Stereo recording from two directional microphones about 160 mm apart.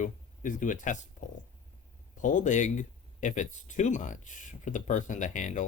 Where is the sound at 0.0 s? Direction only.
55° left (ahead or behind).